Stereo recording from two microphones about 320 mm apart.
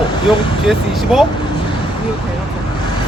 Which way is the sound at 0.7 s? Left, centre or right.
Centre.